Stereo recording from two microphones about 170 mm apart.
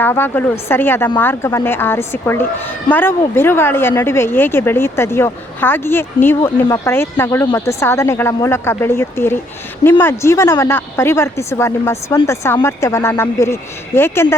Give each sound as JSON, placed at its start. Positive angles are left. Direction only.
{"t": 0.0, "sound": "a woman's voice", "side_deg": 10}